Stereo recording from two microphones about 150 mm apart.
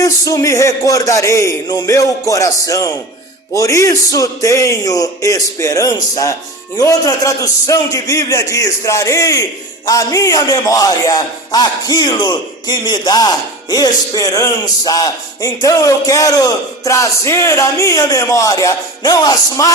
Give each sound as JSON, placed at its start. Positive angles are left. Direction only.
{"t": 0.0, "sound": "speech", "side_deg": 25}